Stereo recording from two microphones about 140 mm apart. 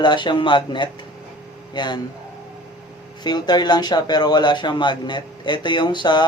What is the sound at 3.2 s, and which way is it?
Speech, 30° left (ahead or behind).